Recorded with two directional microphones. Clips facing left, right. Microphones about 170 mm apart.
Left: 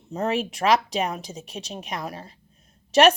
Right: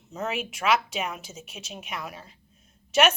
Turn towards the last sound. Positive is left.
turn(degrees=35)  # may be behind; listen again after turning